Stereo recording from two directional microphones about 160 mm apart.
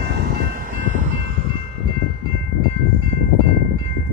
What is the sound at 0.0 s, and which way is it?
Train, 85° right.